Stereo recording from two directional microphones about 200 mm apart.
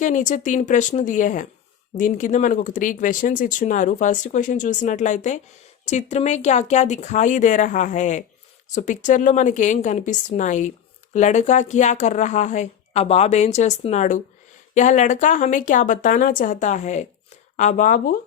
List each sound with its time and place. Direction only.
0.0 s speech: 40° left (ahead or behind)